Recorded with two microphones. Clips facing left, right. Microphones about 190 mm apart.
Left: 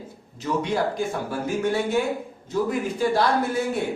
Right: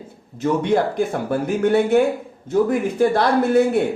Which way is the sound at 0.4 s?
55° right (ahead or behind).